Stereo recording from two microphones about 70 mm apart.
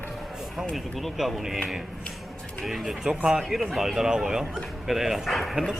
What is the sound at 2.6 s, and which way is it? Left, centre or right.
Speech, centre.